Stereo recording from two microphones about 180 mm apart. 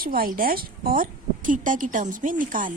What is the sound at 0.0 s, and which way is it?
A woman's voice, 55° right (ahead or behind).